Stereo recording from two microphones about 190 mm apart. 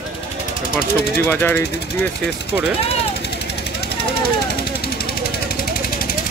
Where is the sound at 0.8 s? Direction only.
55° left (ahead or behind).